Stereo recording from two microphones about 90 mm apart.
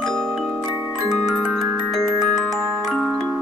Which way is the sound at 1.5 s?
Centre (ahead or behind).